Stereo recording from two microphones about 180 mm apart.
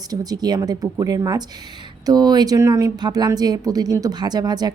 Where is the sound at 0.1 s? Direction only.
20° right (ahead or behind).